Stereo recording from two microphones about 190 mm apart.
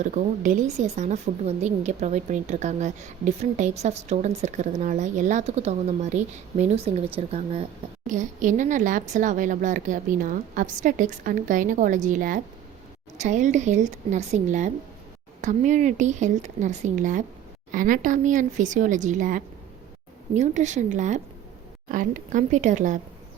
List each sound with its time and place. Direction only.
0.0 s a woman's voice: 40° right (ahead or behind)